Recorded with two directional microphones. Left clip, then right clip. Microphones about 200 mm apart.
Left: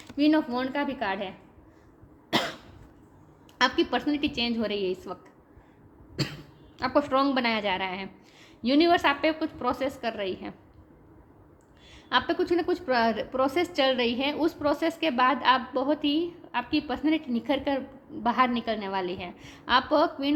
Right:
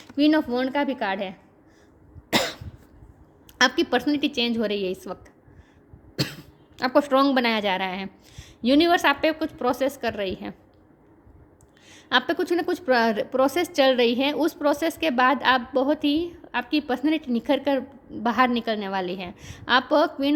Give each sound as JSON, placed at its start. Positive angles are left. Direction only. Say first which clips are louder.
{"t": 0.2, "sound": "a woman's voice", "louder": "right 3 dB", "side_deg": -50}
{"t": 2.3, "sound": "cough", "louder": "right 4 dB", "side_deg": -60}
{"t": 3.6, "sound": "a woman's voice", "louder": "right 4 dB", "side_deg": -50}
{"t": 6.1, "sound": "speech", "louder": "right 4 dB", "side_deg": -55}
{"t": 11.9, "sound": "a woman's voice", "louder": "right 3 dB", "side_deg": -50}